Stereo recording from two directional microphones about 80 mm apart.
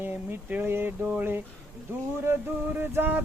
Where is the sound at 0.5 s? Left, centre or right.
Right.